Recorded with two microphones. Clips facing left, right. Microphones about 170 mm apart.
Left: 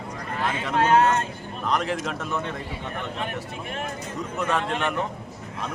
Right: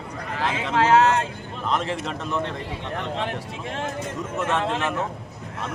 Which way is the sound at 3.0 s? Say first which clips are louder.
Right 4 dB; 90° right.